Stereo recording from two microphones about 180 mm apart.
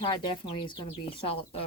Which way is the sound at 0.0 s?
30° left (ahead or behind).